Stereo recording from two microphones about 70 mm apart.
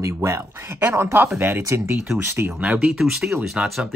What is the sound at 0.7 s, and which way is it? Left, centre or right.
Speech, right.